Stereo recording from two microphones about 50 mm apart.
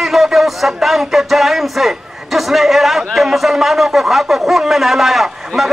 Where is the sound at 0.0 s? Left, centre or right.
Centre.